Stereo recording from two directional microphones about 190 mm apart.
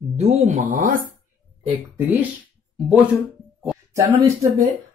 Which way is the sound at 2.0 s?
10° right (ahead or behind).